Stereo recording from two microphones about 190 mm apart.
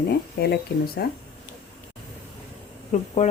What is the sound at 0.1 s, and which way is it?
Speech, 55° left (ahead or behind).